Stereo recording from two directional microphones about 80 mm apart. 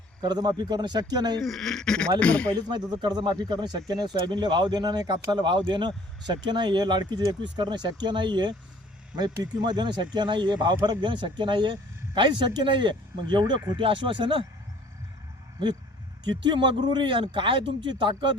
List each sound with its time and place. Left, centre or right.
0.2 s speech: right
1.4 s speech: centre
2.6 s speech: right
9.1 s speech: right
13.7 s speech: right
16.2 s speech: right